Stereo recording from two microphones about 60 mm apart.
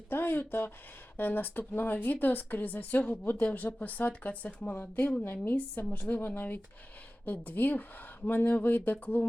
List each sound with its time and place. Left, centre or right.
0.1 s speech: left